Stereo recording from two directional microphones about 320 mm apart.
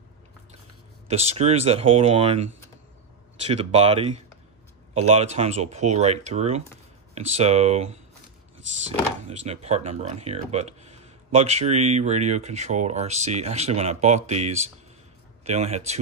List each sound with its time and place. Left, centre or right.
1.0 s speech: centre
3.4 s speech: centre
9.3 s speech: centre